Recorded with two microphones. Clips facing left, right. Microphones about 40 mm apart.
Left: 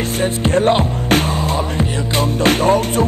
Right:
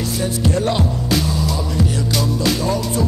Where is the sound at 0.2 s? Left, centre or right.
Left.